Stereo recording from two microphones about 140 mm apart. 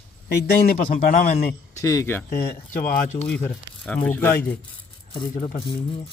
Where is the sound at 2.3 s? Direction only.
80° left.